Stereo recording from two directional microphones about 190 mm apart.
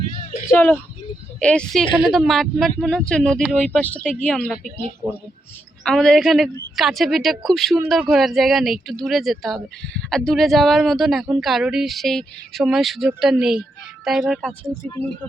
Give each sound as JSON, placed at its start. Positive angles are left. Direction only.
{"t": 0.5, "sound": "speech", "side_deg": 10}
{"t": 5.0, "sound": "speech", "side_deg": -10}
{"t": 5.8, "sound": "speech", "side_deg": 0}